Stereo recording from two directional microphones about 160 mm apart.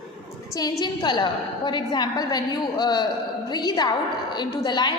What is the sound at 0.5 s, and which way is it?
A woman's voice, 25° left (ahead or behind).